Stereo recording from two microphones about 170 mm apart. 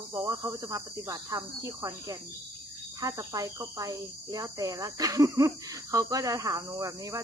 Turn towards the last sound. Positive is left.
turn(degrees=-20)  # may be behind; listen again after turning